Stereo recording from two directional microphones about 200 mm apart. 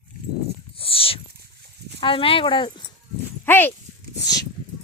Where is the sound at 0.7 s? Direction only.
30° left (ahead or behind).